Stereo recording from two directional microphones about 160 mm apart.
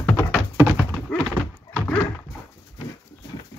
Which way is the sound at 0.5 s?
5° right (ahead or behind).